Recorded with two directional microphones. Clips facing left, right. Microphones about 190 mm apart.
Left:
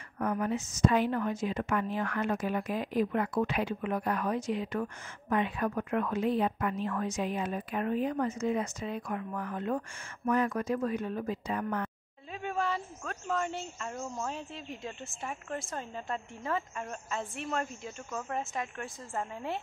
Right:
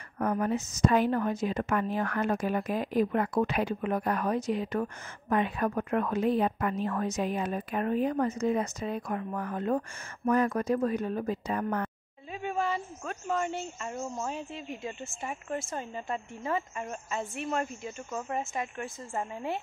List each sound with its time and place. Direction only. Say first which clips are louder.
0.2 s a woman's voice: right 2 dB; 40° right (ahead or behind)
12.3 s a woman's voice: right 2 dB; 5° right (ahead or behind)